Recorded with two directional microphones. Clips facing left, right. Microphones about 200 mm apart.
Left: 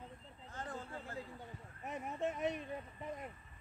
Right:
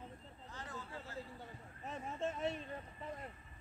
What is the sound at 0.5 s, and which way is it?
Vehicle, 50° left (ahead or behind).